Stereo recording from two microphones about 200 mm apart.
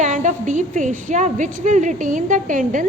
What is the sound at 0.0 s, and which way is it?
A woman's voice, 35° right (ahead or behind).